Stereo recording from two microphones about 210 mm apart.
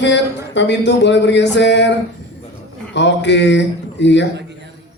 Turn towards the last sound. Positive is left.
turn(degrees=55)  # may be behind; listen again after turning